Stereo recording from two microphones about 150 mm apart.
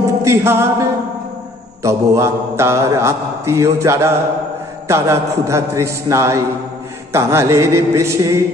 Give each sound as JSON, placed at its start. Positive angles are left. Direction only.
{"t": 0.0, "sound": "music", "side_deg": -20}
{"t": 1.8, "sound": "speech", "side_deg": -20}